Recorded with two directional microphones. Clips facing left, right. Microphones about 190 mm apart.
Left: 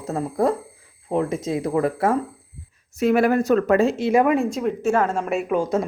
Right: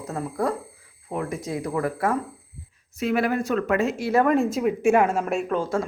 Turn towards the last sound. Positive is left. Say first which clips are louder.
# left 3 dB
turn(degrees=20)  # may be behind; listen again after turning